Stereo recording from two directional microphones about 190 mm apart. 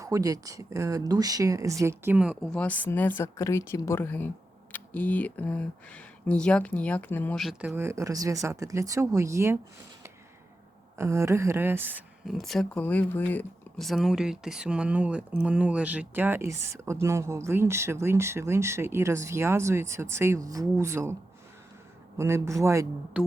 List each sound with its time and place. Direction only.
0.0 s speech: 20° right (ahead or behind); by 7.7 s centre (ahead or behind)
7.7 s speech: 15° right (ahead or behind)
10.9 s speech: 15° right (ahead or behind)
22.2 s speech: 15° right (ahead or behind)
23.1 s music: 5° right (ahead or behind)